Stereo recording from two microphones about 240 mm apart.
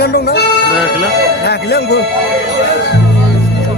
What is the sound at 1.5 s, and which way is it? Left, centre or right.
Speech, left.